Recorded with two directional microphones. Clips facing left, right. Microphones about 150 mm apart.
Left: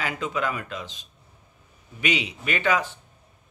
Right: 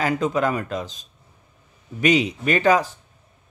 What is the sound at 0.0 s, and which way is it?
Speech, 40° right (ahead or behind).